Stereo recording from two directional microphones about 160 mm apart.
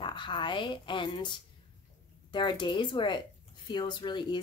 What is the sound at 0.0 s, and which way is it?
Speech, 30° left (ahead or behind).